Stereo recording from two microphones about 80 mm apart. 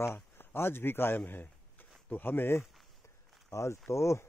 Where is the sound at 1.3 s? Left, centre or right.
Left.